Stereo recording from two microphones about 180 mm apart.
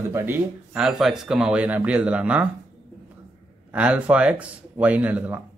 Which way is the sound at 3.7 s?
10° right (ahead or behind).